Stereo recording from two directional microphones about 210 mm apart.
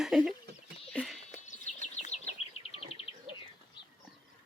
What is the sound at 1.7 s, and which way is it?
Bird, 35° left (ahead or behind).